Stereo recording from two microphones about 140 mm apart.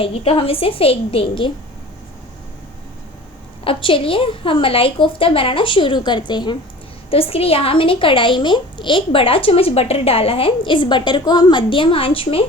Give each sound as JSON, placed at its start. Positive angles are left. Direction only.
{"t": 0.0, "sound": "a woman's voice", "side_deg": 45}
{"t": 3.6, "sound": "speech", "side_deg": 40}
{"t": 7.1, "sound": "speech", "side_deg": 45}